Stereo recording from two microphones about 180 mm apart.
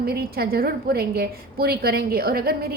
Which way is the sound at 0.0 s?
60° right (ahead or behind).